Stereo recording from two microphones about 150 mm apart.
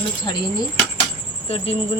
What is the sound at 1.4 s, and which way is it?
Speech, 40° left (ahead or behind).